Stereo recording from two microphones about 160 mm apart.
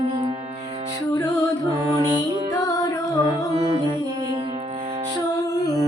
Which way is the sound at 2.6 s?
20° left (ahead or behind).